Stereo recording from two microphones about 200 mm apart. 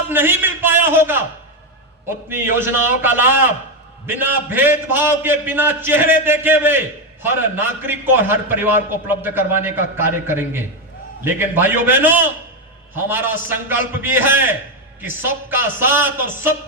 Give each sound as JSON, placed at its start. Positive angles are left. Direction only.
{"t": 0.1, "sound": "a man's voice", "side_deg": -10}
{"t": 2.6, "sound": "a man's voice", "side_deg": -10}